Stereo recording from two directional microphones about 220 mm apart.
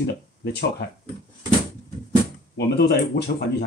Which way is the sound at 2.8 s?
45° left (ahead or behind).